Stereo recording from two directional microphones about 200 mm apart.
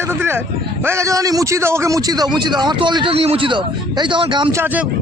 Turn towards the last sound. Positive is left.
turn(degrees=-10)  # may be behind; listen again after turning